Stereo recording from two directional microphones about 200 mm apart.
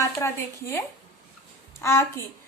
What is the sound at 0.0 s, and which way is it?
A child's voice, 15° left (ahead or behind).